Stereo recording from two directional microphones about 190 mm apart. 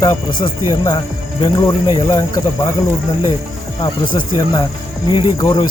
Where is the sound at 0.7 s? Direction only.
20° left (ahead or behind).